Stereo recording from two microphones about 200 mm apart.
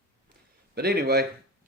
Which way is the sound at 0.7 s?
50° right (ahead or behind).